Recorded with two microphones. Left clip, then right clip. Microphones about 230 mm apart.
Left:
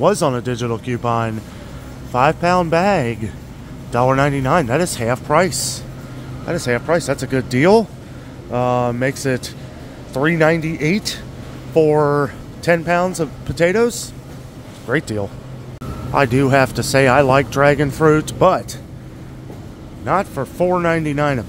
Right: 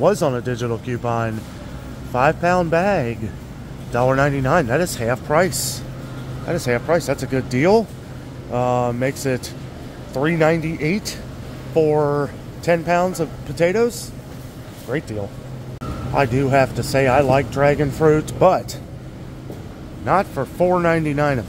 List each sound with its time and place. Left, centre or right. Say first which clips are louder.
0.0 s speech: left 2 dB; centre
20.1 s speech: even; centre